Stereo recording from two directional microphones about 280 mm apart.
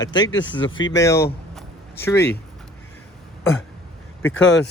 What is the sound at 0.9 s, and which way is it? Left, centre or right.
Speech, centre.